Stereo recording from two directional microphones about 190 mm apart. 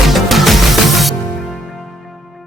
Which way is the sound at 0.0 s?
Centre (ahead or behind).